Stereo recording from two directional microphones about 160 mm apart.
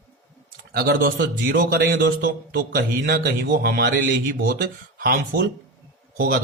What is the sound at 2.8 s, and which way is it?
A man's voice, 80° right.